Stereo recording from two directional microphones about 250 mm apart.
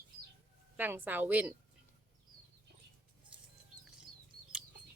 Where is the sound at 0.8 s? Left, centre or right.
Centre.